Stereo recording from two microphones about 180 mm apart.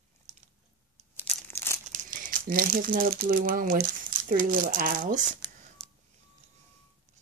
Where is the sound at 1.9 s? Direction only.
50° right (ahead or behind).